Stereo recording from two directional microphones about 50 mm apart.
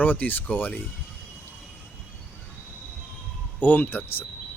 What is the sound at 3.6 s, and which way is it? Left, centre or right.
Speech, left.